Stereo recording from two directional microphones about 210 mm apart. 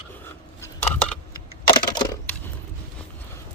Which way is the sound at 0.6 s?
10° left (ahead or behind).